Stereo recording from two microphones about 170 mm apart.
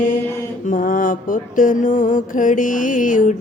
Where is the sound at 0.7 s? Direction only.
50° left (ahead or behind).